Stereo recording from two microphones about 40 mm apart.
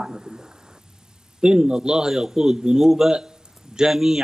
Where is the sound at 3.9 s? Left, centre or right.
Centre.